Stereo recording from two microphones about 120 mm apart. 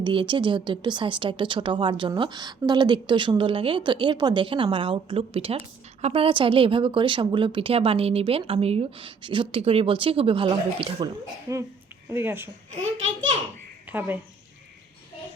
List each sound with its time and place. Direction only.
0.0 s a woman's voice: 40° right (ahead or behind)
12.1 s speech: 20° right (ahead or behind)
13.8 s speech: 15° right (ahead or behind)